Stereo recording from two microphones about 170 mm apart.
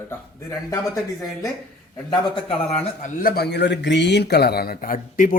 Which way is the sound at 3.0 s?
60° left (ahead or behind).